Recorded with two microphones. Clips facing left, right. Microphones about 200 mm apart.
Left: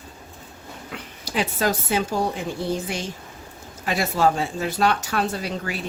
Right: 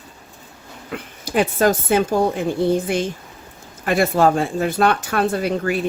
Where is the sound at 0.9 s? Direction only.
50° right (ahead or behind).